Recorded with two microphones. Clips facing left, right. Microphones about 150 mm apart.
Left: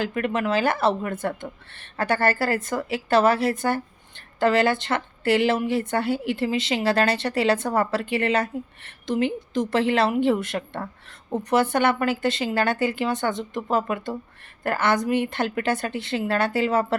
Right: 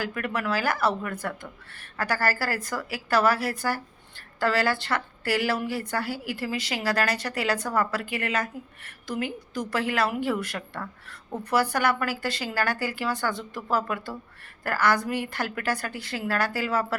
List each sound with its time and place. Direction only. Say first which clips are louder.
0.0 s speech: left 5 dB; 25° left (ahead or behind)